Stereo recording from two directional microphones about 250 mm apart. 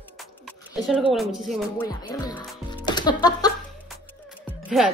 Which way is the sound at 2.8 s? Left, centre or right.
Centre.